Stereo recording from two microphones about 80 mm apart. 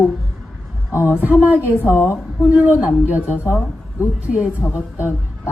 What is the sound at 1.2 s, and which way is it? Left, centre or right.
A woman's voice, right.